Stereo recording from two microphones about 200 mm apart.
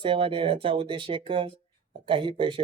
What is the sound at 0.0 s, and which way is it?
Speech, 25° right (ahead or behind).